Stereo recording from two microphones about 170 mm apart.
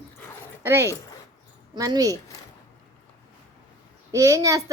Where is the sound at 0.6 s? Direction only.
15° right (ahead or behind).